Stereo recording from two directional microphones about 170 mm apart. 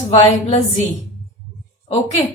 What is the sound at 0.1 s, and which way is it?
Speech, 40° left (ahead or behind).